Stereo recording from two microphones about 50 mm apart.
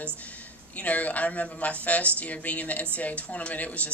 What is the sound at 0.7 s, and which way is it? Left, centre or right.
A woman's voice, left.